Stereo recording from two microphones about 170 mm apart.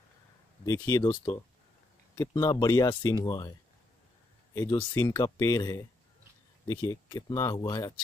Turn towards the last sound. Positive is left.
turn(degrees=20)  # may be behind; listen again after turning